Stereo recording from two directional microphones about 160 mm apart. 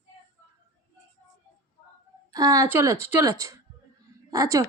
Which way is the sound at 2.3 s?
20° right (ahead or behind).